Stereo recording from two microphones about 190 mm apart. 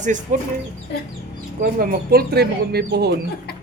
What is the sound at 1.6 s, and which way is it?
Speech, 50° right (ahead or behind).